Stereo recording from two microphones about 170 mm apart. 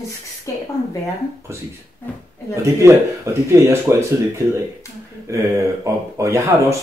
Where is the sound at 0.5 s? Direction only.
20° left (ahead or behind).